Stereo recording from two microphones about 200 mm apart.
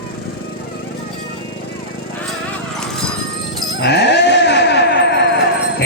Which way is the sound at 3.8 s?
60° left (ahead or behind).